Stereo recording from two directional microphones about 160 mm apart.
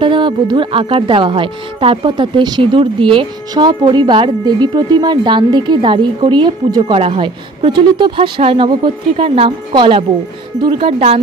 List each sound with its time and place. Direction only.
0.0 s a woman's voice: 30° right (ahead or behind)